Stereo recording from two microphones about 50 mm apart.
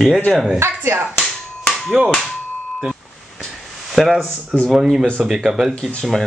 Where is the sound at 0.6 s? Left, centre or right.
Right.